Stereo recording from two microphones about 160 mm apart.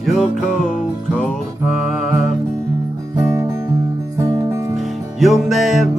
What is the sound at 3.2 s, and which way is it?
Music, 20° right (ahead or behind).